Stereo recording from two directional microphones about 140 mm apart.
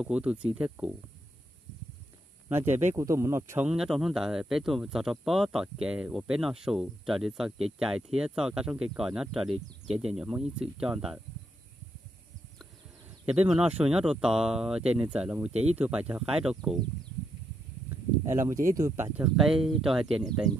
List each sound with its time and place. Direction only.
0.0 s speech: 5° right (ahead or behind)
3.0 s speech: 20° right (ahead or behind)
3.6 s speech: 5° right (ahead or behind)
13.2 s speech: 10° right (ahead or behind)
15.5 s speech: 50° right (ahead or behind)
15.8 s speech: 10° right (ahead or behind)
17.8 s a sound: 20° right (ahead or behind)
18.8 s speech: 25° right (ahead or behind)
19.1 s speech: 5° right (ahead or behind)